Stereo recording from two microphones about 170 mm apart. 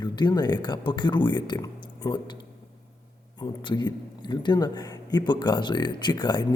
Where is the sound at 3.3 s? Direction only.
25° left (ahead or behind).